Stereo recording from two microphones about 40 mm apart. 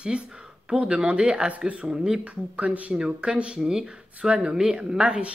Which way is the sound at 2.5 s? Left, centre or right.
Right.